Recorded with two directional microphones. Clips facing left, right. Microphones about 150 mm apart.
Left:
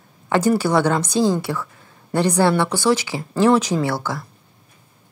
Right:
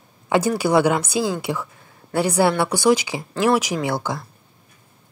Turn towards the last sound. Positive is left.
turn(degrees=-15)  # may be behind; listen again after turning